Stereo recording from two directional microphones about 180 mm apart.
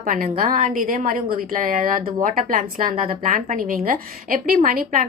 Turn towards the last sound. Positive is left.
turn(degrees=-50)  # may be behind; listen again after turning